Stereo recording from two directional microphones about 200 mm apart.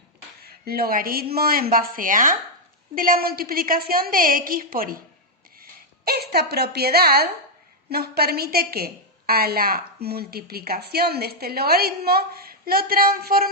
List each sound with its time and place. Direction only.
0.4 s a woman's voice: 50° right (ahead or behind)
6.1 s a woman's voice: 50° right (ahead or behind)